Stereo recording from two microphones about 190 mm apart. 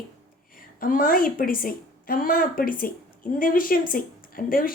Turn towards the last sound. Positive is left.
turn(degrees=50)  # may be behind; listen again after turning